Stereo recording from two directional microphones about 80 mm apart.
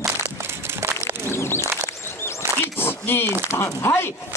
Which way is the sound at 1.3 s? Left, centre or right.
Left.